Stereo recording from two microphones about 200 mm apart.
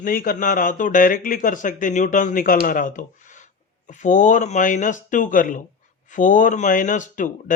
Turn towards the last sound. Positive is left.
turn(degrees=40)  # may be behind; listen again after turning